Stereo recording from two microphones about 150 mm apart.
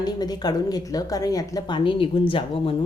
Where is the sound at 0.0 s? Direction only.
25° left (ahead or behind).